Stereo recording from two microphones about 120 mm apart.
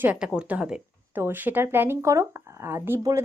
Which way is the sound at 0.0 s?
10° right (ahead or behind).